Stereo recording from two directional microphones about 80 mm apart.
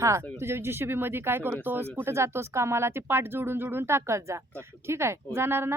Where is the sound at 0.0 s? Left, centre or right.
Right.